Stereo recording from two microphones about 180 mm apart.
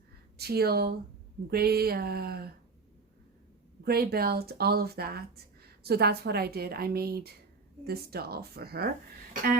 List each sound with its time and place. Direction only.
0.3 s a woman's voice: 60° right (ahead or behind)
3.8 s a woman's voice: 60° right (ahead or behind)